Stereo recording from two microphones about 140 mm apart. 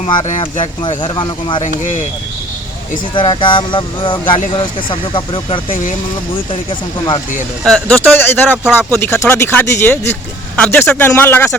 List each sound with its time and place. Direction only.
0.2 s speech: 60° left (ahead or behind)
1.0 s speech: 35° left (ahead or behind)
1.6 s speech: 60° left (ahead or behind)
3.2 s speech: 35° left (ahead or behind)
7.6 s speech: 5° left (ahead or behind)